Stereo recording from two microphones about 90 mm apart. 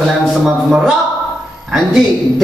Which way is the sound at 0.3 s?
5° right (ahead or behind).